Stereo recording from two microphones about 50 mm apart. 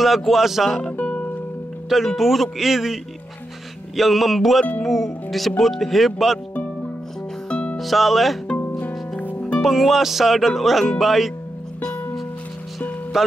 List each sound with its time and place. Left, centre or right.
0.0 s speech: centre
0.9 s music: left
1.9 s speech: centre
7.4 s music: left
7.7 s speech: centre
8.5 s music: left
9.6 s speech: centre
13.1 s speech: centre